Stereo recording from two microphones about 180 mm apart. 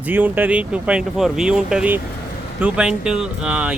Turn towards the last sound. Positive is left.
turn(degrees=-5)  # may be behind; listen again after turning